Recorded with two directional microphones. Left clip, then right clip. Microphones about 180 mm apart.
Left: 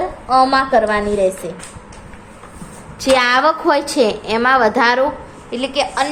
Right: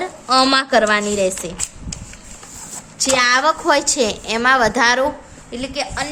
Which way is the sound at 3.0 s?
5° right (ahead or behind).